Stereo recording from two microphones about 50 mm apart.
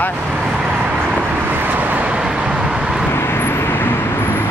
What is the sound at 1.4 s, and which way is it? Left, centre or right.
Vehicle, right.